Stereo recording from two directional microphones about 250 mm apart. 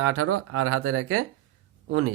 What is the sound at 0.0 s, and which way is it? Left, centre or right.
Speech, right.